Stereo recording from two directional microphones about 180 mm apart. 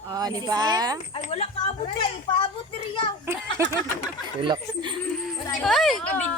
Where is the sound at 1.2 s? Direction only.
35° left (ahead or behind).